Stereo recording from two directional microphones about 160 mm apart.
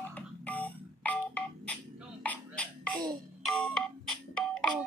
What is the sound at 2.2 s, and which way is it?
Music, 10° left (ahead or behind).